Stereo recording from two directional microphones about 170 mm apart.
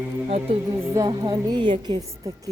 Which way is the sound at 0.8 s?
20° right (ahead or behind).